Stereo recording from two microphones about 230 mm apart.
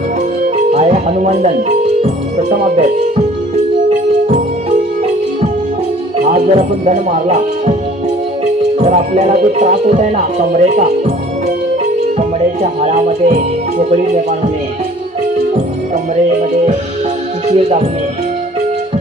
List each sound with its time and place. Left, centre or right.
0.7 s speech: right
3.9 s music: right
6.1 s speech: right
8.7 s speech: right
12.8 s speech: right
17.5 s speech: right